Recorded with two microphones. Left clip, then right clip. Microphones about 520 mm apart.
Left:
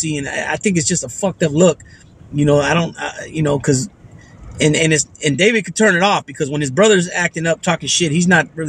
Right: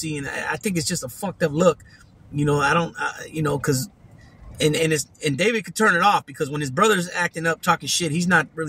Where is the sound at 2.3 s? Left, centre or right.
Right.